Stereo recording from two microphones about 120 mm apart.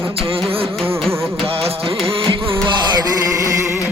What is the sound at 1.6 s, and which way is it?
Music, 55° right (ahead or behind).